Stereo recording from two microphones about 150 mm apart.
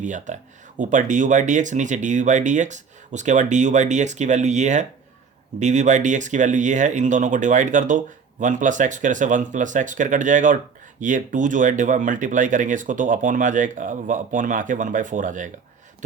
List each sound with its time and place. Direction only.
0.0 s speech: 55° right (ahead or behind)